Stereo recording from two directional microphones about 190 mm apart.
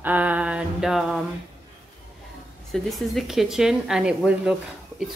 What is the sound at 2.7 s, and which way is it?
Speech, centre (ahead or behind).